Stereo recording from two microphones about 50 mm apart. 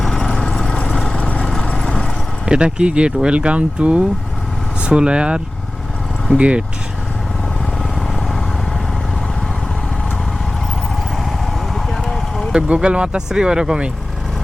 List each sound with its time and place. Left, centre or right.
0.0 s vehicle: centre
1.1 s vehicle: left
1.6 s vehicle: centre
2.5 s speech: centre
11.3 s vehicle: centre
12.5 s speech: centre